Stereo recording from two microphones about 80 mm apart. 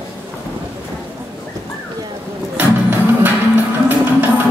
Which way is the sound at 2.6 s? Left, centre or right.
Right.